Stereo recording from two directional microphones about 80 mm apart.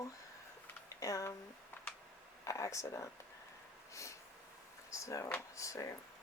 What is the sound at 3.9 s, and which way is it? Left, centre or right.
Snort, left.